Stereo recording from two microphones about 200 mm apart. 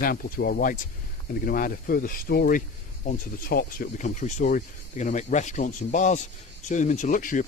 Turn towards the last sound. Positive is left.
turn(degrees=40)  # may be behind; listen again after turning